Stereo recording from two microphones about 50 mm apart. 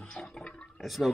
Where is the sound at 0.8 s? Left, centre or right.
Centre.